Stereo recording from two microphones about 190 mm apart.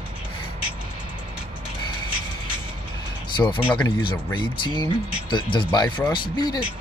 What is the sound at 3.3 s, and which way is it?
Speech, 25° left (ahead or behind).